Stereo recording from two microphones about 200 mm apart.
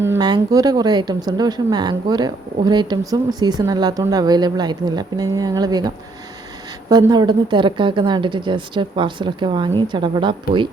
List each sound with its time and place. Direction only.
0.0 s speech: 15° right (ahead or behind)
6.9 s speech: 20° right (ahead or behind)